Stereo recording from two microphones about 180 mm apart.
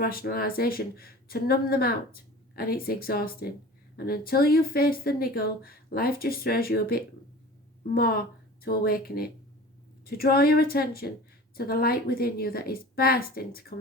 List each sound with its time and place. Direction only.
0.0 s a woman's voice: 55° left (ahead or behind)